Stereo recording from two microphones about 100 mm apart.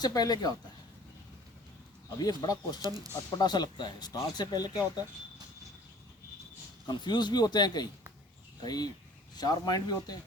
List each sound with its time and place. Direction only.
0.0 s speech: 40° left (ahead or behind)
2.1 s speech: 40° left (ahead or behind)
2.8 s speech: 40° right (ahead or behind)
3.2 s speech: 40° left (ahead or behind)
6.8 s speech: 50° left (ahead or behind)